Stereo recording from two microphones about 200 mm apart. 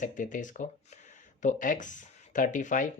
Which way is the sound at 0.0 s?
40° left (ahead or behind).